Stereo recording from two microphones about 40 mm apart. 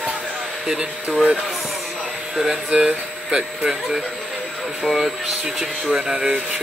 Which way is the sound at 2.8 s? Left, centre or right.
Centre.